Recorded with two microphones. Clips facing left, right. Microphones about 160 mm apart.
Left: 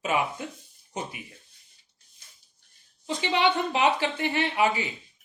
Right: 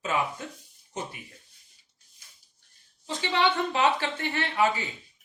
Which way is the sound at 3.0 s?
15° left (ahead or behind).